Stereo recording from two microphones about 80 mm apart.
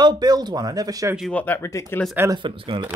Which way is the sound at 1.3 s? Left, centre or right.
Left.